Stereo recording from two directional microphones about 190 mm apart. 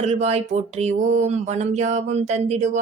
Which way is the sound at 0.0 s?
35° right (ahead or behind).